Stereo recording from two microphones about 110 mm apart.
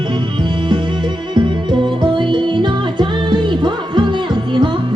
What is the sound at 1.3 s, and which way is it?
Music, 45° right (ahead or behind).